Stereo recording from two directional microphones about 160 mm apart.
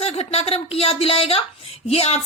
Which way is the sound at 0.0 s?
40° left (ahead or behind).